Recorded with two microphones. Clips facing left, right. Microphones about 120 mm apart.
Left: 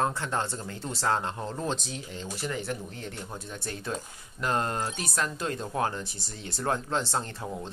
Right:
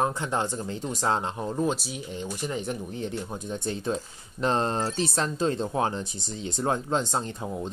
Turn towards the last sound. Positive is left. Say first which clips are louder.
# right 3 dB
turn(degrees=-20)  # may be behind; listen again after turning